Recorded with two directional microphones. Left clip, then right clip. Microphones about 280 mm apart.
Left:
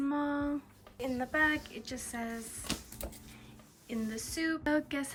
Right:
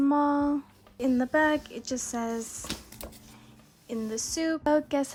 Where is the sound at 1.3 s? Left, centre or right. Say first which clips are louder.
Right 3 dB; centre.